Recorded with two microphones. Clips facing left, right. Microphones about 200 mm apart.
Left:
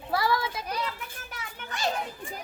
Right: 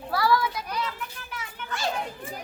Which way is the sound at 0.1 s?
20° left (ahead or behind).